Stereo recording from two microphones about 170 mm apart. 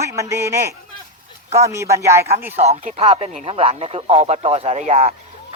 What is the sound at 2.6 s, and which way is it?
Speech, 40° right (ahead or behind).